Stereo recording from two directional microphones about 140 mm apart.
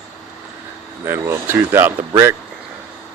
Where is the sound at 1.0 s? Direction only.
20° right (ahead or behind).